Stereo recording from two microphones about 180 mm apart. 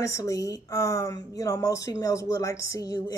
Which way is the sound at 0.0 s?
15° left (ahead or behind).